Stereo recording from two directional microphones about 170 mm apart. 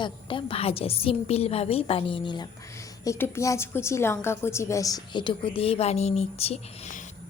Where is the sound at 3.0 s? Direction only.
15° left (ahead or behind).